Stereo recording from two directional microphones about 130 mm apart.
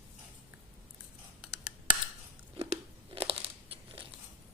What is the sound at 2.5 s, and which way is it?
Crunch, 50° right (ahead or behind).